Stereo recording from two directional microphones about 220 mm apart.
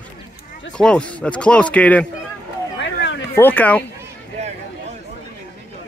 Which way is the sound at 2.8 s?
55° left (ahead or behind).